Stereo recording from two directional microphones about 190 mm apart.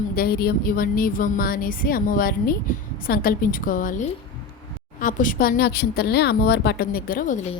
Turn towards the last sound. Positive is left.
turn(degrees=40)  # may be behind; listen again after turning